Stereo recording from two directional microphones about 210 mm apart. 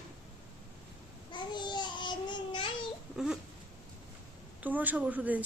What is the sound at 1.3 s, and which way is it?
Babbling, 20° left (ahead or behind).